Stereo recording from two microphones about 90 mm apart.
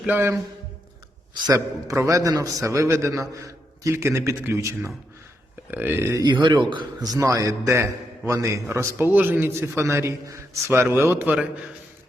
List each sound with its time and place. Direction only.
1.3 s a man's voice: 40° right (ahead or behind); by 6.1 s 25° right (ahead or behind)
6.2 s a man's voice: 60° right (ahead or behind)
7.2 s a man's voice: 35° right (ahead or behind)